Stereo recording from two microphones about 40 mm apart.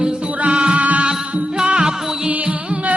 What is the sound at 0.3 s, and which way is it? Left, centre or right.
Music, right.